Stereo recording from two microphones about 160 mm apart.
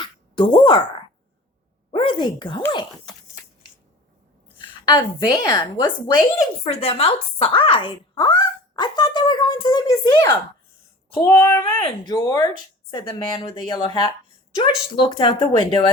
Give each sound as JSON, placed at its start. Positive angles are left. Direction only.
{"t": 0.0, "sound": "a sound", "side_deg": 30}
{"t": 1.9, "sound": "speech", "side_deg": 35}
{"t": 4.5, "sound": "a woman's voice", "side_deg": 30}
{"t": 6.7, "sound": "speech", "side_deg": 40}
{"t": 11.1, "sound": "a woman's voice", "side_deg": 15}